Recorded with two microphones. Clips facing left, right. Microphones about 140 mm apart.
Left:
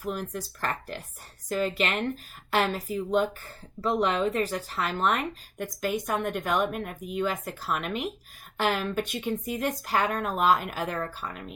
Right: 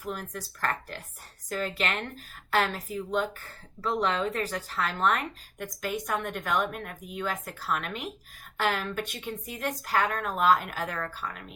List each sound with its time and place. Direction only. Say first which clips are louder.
0.1 s speech: left 3 dB; 20° left (ahead or behind)